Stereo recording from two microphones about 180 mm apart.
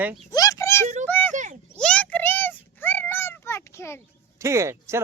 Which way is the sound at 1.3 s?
45° right (ahead or behind).